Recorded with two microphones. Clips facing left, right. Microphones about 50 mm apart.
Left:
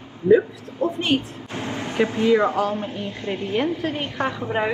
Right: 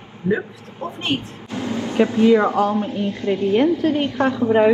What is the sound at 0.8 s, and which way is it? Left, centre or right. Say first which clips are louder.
Speech: left 3 dB; right.